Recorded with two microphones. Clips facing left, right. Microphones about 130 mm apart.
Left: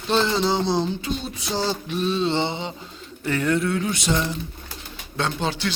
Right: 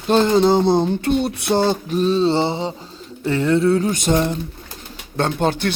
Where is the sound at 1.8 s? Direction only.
40° right (ahead or behind).